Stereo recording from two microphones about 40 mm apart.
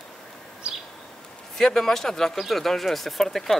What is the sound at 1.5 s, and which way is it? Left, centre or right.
Speech, centre.